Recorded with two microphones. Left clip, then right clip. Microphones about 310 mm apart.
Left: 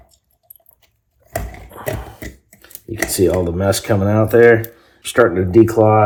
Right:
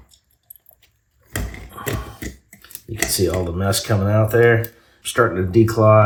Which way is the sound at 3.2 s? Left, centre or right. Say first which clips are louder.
Left 6 dB; centre.